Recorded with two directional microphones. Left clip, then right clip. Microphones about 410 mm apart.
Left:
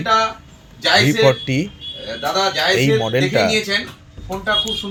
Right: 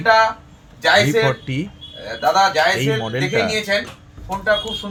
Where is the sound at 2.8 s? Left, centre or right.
Centre.